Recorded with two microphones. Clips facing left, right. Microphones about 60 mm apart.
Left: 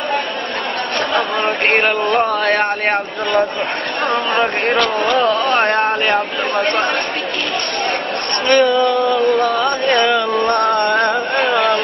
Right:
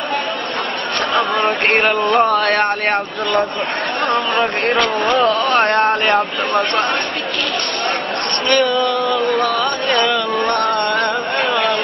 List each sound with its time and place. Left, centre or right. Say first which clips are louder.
1.1 s a sound: right 2 dB; centre
8.5 s speech: left 3 dB; left
9.5 s music: left 2 dB; centre